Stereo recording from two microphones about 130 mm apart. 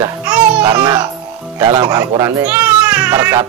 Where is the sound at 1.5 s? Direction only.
35° right (ahead or behind).